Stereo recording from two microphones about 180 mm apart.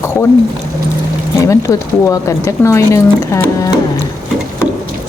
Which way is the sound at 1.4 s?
15° left (ahead or behind).